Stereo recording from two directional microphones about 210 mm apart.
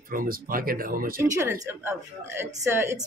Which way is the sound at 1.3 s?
10° right (ahead or behind).